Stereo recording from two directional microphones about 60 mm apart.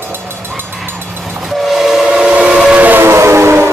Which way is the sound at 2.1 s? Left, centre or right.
Centre.